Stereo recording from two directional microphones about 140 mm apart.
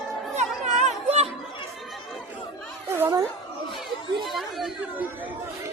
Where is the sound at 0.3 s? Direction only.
55° right (ahead or behind).